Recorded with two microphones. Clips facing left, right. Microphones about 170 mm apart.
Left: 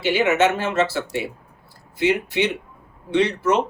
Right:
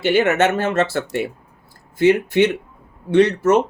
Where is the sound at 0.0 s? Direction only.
50° right (ahead or behind).